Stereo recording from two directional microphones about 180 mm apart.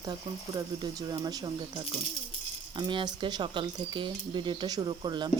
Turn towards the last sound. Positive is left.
turn(degrees=-25)  # may be behind; listen again after turning